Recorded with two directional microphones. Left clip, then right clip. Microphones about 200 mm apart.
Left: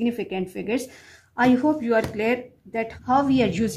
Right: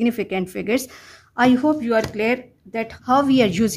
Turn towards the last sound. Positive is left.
turn(degrees=-35)  # may be behind; listen again after turning